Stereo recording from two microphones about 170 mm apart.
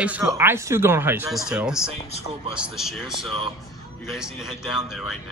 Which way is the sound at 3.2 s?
30° right (ahead or behind).